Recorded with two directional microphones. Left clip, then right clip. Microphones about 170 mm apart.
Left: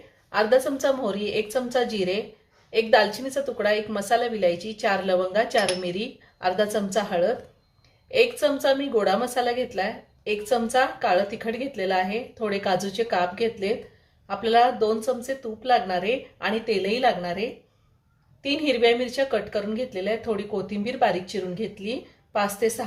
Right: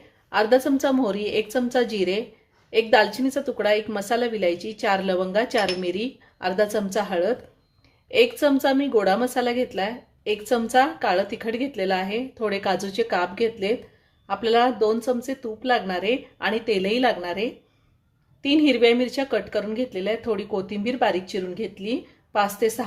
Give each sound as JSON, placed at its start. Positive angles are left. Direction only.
{"t": 0.3, "sound": "a woman's voice", "side_deg": -50}